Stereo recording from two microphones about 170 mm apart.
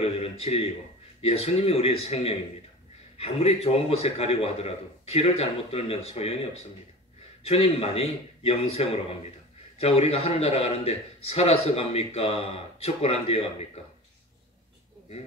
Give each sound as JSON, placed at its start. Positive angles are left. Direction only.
{"t": 0.0, "sound": "a man's voice", "side_deg": 35}
{"t": 7.4, "sound": "a man's voice", "side_deg": 35}